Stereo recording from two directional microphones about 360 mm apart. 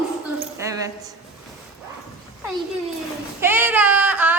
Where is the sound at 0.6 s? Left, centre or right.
Centre.